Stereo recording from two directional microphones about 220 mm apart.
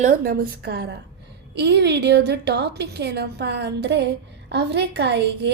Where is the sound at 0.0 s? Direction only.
40° right (ahead or behind).